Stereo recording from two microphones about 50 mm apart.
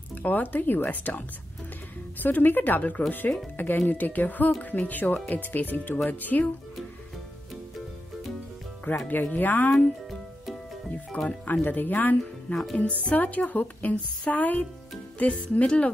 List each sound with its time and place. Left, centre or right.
0.1 s speech: left
9.0 s speech: left
11.1 s speech: left
15.1 s music: left